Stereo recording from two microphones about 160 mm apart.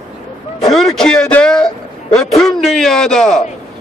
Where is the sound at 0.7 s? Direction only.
5° left (ahead or behind).